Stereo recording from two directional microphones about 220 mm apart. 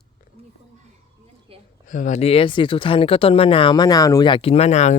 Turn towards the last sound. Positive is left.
turn(degrees=30)  # may be behind; listen again after turning